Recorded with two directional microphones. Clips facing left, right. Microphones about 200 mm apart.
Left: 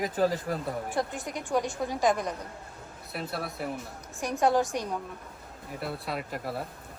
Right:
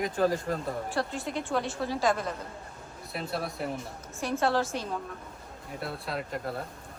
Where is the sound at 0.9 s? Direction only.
15° left (ahead or behind).